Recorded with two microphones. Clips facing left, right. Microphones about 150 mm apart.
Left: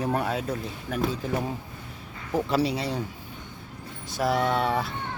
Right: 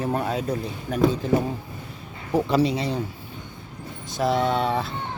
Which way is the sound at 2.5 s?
10° left (ahead or behind).